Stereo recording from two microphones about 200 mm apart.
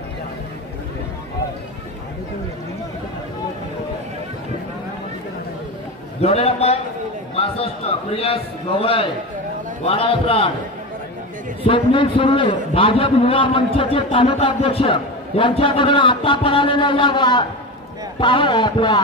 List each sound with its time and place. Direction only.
6.2 s a man's voice: 30° left (ahead or behind)
11.6 s a man's voice: 25° left (ahead or behind)